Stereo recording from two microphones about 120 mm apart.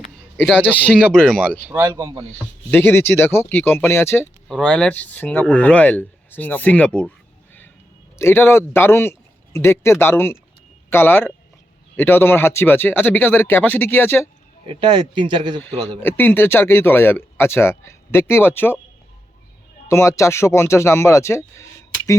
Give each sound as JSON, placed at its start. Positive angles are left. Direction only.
{"t": 0.7, "sound": "speech", "side_deg": 15}
{"t": 1.7, "sound": "speech", "side_deg": -15}
{"t": 2.6, "sound": "speech", "side_deg": 20}
{"t": 4.4, "sound": "speech", "side_deg": 5}
{"t": 8.2, "sound": "speech", "side_deg": 20}
{"t": 14.7, "sound": "speech", "side_deg": -40}
{"t": 16.0, "sound": "speech", "side_deg": 15}
{"t": 19.9, "sound": "speech", "side_deg": 25}